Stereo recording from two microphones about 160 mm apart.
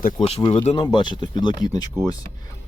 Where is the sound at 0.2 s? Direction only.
35° left (ahead or behind).